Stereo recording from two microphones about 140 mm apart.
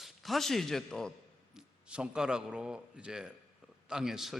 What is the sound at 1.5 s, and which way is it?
A man's voice, 5° right (ahead or behind).